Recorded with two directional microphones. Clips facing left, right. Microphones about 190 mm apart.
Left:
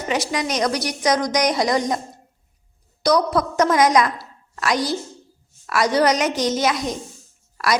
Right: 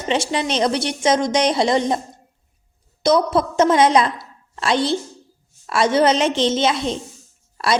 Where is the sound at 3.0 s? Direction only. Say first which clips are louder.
Right 2 dB; 25° right (ahead or behind).